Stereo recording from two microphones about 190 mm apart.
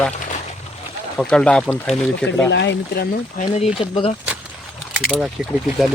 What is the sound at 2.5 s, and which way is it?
Speech, 65° left (ahead or behind).